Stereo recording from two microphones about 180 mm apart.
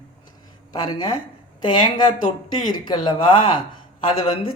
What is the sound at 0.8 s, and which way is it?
Speech, 25° left (ahead or behind).